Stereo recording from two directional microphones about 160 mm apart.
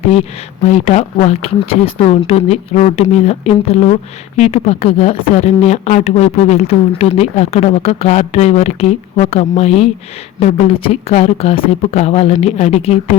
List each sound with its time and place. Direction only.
0.1 s speech: 45° left (ahead or behind)